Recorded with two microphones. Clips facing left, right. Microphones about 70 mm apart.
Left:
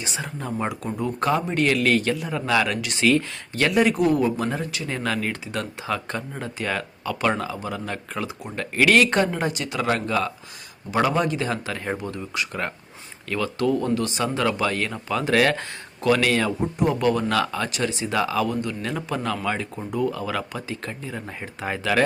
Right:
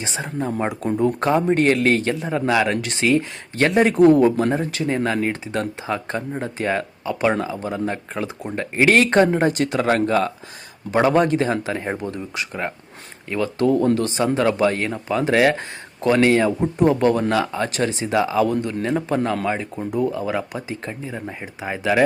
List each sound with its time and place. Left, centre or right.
0.0 s speech: right
4.4 s speech: right
17.3 s speech: right
17.7 s speech: right
21.2 s speech: centre